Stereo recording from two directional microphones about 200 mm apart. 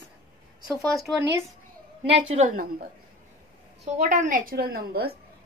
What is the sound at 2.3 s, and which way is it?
A woman's voice, 40° right (ahead or behind).